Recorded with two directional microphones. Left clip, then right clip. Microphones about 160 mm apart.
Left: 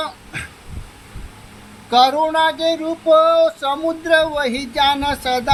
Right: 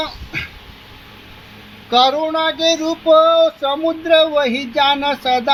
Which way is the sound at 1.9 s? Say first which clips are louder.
Even; 30° right (ahead or behind).